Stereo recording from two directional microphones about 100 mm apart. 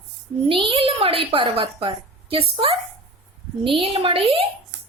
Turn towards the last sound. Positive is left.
turn(degrees=-65)  # may be behind; listen again after turning